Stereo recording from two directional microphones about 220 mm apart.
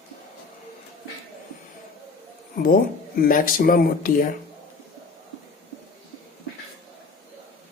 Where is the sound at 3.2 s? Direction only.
40° left (ahead or behind).